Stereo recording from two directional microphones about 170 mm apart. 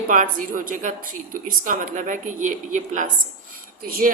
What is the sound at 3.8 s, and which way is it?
Speech, 60° right (ahead or behind).